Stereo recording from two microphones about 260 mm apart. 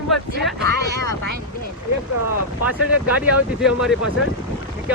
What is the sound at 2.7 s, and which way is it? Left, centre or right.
Speech, left.